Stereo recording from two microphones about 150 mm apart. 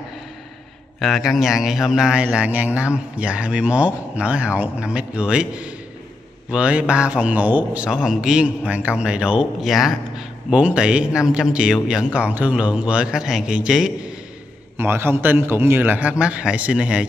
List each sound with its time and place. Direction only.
0.9 s a man's voice: centre (ahead or behind)
14.8 s a man's voice: 15° right (ahead or behind)